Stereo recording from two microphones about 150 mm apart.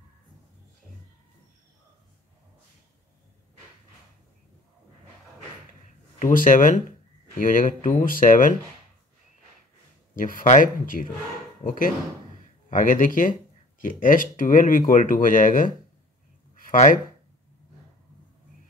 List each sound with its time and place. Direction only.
6.1 s speech: 60° left (ahead or behind)
10.1 s speech: 55° left (ahead or behind)